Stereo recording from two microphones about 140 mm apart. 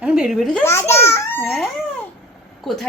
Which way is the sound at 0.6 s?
20° left (ahead or behind).